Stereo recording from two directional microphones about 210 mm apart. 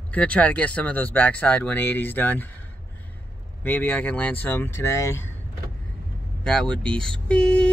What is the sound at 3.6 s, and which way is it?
Speech, 10° left (ahead or behind).